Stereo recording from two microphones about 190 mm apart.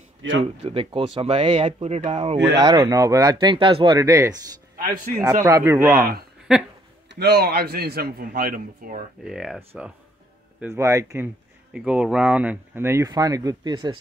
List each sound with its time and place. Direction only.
0.4 s speech: 30° right (ahead or behind)
2.3 s a man's voice: 65° right (ahead or behind)
2.6 s speech: 20° right (ahead or behind)
4.7 s a man's voice: 45° right (ahead or behind)
5.2 s speech: 15° right (ahead or behind)
7.1 s a man's voice: 60° right (ahead or behind)
9.2 s speech: 5° right (ahead or behind)
10.6 s speech: 15° right (ahead or behind)
11.7 s speech: 5° right (ahead or behind); by 13.9 s 20° right (ahead or behind)